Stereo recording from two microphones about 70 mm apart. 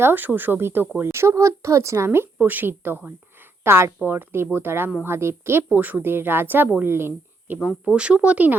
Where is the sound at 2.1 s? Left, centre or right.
Right.